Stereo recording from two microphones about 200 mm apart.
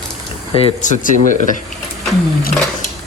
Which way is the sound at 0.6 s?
40° left (ahead or behind).